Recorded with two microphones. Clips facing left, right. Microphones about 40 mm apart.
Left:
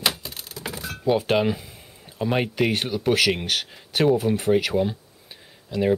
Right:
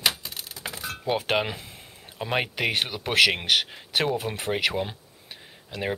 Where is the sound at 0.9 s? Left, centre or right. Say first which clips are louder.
Left 6 dB; centre.